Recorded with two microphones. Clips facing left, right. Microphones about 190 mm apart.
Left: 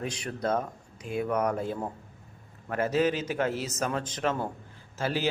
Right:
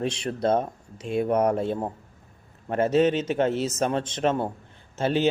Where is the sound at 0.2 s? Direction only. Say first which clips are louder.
Right 4 dB; 30° right (ahead or behind).